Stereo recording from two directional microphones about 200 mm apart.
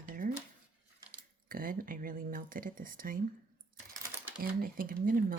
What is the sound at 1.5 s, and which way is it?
Speech, 45° right (ahead or behind).